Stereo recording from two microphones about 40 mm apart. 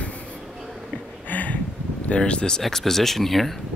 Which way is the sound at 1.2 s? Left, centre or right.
Left.